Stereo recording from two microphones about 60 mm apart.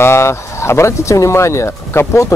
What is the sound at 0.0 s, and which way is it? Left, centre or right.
Speech, left.